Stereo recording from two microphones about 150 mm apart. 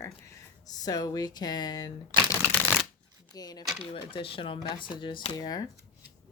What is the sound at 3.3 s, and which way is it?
Speech, 25° left (ahead or behind).